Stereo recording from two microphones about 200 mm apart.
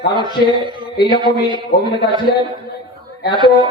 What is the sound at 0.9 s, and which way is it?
Speech, 20° left (ahead or behind).